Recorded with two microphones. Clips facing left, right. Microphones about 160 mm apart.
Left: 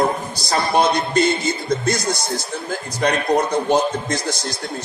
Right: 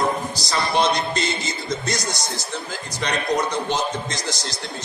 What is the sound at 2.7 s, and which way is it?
A man's voice, 55° left (ahead or behind).